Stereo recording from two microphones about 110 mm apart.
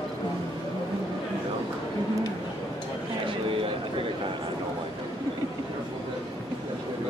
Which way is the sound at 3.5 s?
55° right (ahead or behind).